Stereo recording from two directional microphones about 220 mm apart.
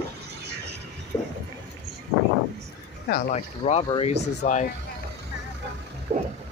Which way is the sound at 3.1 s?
40° left (ahead or behind).